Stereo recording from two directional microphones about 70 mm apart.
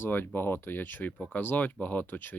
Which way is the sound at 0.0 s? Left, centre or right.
Left.